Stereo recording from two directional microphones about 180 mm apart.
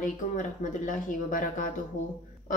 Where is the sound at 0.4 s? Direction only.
45° left (ahead or behind).